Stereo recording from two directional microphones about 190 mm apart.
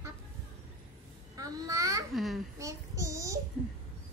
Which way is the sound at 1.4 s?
20° right (ahead or behind).